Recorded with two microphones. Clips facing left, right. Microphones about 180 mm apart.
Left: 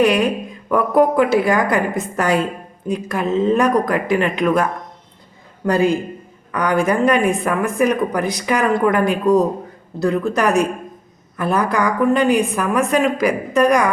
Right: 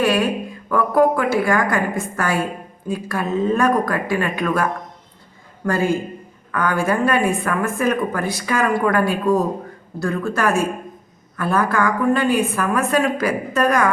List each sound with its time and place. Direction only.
0.0 s a woman's voice: 15° left (ahead or behind)